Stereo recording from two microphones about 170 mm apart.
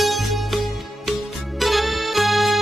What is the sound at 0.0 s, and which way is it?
Music, centre (ahead or behind).